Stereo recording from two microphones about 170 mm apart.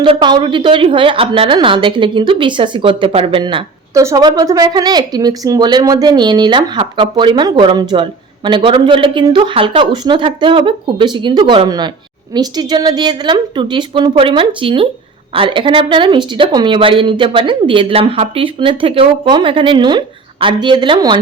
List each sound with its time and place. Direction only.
0.0 s a woman's voice: 25° right (ahead or behind)
3.4 s a woman's voice: 20° right (ahead or behind)